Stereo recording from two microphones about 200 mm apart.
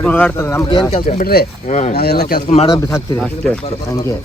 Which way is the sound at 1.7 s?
35° left (ahead or behind).